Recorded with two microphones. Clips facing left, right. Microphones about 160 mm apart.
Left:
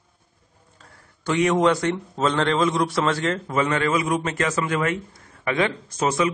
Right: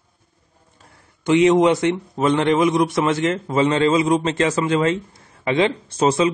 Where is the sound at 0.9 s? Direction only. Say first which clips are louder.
Right 6 dB; 20° right (ahead or behind).